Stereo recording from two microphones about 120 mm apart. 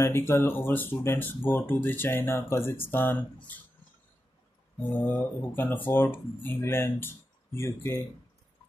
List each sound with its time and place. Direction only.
0.0 s speech: 20° left (ahead or behind)
4.9 s speech: 15° left (ahead or behind)